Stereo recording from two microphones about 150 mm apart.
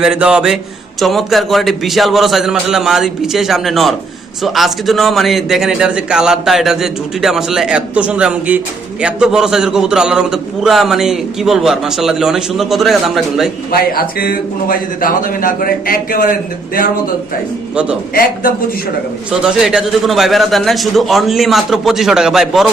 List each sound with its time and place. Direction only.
0.0 s a man's voice: 5° right (ahead or behind)
13.7 s a man's voice: 80° left
19.3 s a man's voice: 5° right (ahead or behind)